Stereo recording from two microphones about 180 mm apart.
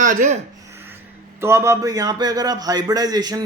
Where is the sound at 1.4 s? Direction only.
15° right (ahead or behind).